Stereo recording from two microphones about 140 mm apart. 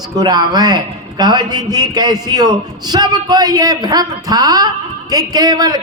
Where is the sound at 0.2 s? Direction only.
30° right (ahead or behind).